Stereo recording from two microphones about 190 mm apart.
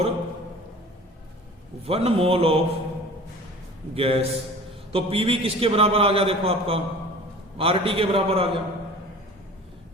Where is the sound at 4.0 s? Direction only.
30° right (ahead or behind).